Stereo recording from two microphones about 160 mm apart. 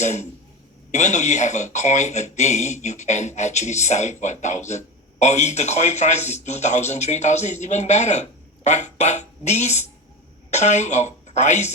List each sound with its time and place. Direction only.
0.0 s a man's voice: 45° left (ahead or behind)